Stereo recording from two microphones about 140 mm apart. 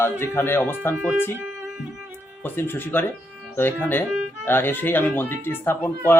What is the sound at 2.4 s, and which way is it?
Speech, 15° left (ahead or behind).